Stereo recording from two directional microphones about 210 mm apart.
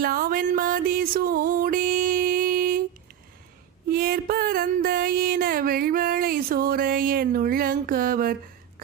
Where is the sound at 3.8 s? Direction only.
45° right (ahead or behind).